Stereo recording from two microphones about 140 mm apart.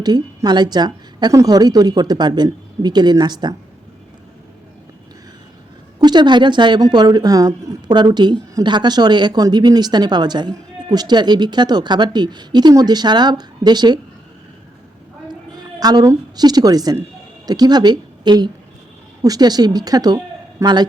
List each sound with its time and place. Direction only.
0.0 s a woman's voice: 30° right (ahead or behind)
6.0 s a woman's voice: 30° right (ahead or behind)
15.3 s a woman's voice: 30° right (ahead or behind)